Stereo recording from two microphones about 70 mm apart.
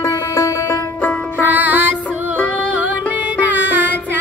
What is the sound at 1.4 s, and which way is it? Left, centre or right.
Music, right.